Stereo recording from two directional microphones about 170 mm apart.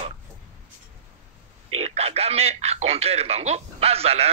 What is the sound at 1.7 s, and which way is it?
A man's voice, 35° right (ahead or behind).